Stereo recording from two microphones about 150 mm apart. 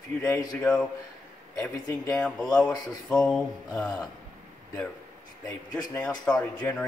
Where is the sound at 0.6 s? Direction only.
5° left (ahead or behind).